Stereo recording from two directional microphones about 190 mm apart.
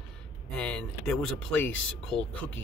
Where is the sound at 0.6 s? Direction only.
5° left (ahead or behind).